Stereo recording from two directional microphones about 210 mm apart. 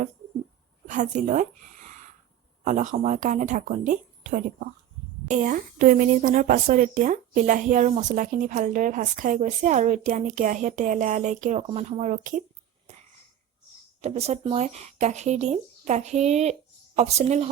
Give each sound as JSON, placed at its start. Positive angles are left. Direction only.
{"t": 0.9, "sound": "speech", "side_deg": -35}
{"t": 2.6, "sound": "speech", "side_deg": -35}
{"t": 12.9, "sound": "a sound", "side_deg": -30}
{"t": 14.0, "sound": "speech", "side_deg": -30}